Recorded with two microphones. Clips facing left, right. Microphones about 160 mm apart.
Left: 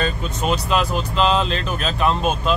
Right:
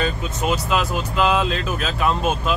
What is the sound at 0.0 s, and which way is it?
Speech, 5° right (ahead or behind).